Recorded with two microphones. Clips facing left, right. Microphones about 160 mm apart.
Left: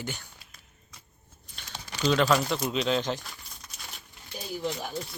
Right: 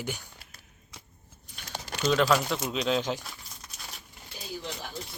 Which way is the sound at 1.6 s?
10° right (ahead or behind).